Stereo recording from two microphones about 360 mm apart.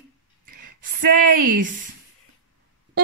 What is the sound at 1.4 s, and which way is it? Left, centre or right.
Speech, right.